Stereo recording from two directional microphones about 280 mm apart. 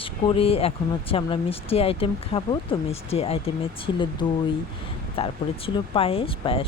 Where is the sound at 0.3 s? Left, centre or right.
Centre.